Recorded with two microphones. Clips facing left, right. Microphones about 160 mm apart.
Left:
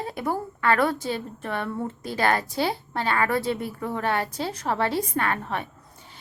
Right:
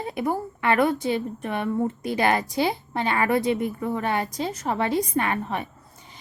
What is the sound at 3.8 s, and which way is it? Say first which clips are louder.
A woman's voice: right 1 dB; 10° right (ahead or behind).